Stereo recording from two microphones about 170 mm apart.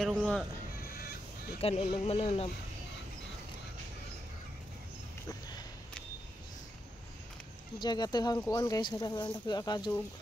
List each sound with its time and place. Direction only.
0.0 s speech: centre (ahead or behind)
0.9 s music: 60° left (ahead or behind)
1.6 s speech: 35° left (ahead or behind)
7.8 s speech: 25° left (ahead or behind)